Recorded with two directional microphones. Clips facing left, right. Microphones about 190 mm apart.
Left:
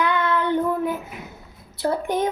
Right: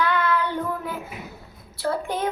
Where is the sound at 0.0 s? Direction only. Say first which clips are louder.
Left 1 dB; 20° left (ahead or behind).